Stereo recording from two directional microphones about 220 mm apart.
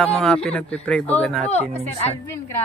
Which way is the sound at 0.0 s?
5° left (ahead or behind).